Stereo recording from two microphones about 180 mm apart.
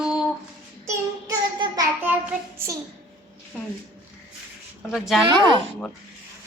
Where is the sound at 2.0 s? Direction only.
10° right (ahead or behind).